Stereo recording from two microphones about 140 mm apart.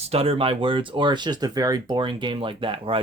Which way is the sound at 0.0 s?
45° right (ahead or behind).